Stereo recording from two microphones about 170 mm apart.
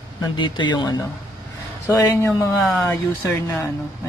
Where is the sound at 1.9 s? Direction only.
15° left (ahead or behind).